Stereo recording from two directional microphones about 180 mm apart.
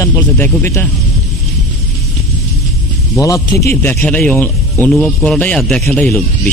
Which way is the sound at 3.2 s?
20° left (ahead or behind).